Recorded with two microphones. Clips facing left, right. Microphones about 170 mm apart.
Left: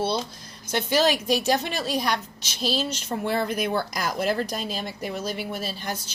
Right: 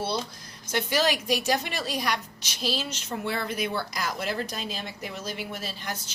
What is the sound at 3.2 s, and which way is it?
A woman's voice, 45° left (ahead or behind).